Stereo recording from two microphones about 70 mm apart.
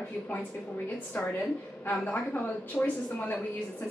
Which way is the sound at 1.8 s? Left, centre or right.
Left.